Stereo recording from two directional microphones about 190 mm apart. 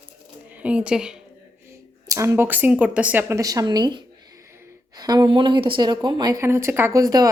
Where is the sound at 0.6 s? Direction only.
5° right (ahead or behind).